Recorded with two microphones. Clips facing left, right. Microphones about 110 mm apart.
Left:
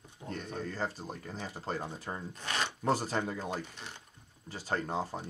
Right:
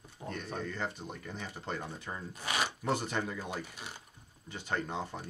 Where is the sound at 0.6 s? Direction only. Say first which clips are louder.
Left 1 dB; 35° left (ahead or behind).